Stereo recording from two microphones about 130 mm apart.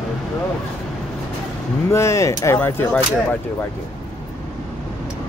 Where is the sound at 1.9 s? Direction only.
20° left (ahead or behind).